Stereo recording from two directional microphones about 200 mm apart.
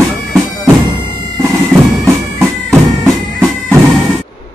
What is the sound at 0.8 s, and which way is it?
Music, 20° right (ahead or behind).